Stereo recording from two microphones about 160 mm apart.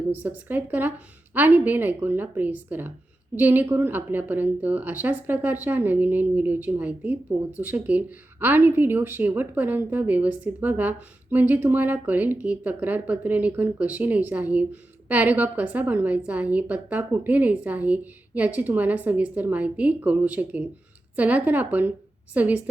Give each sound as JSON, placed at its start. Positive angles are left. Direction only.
{"t": 0.1, "sound": "a woman's voice", "side_deg": -10}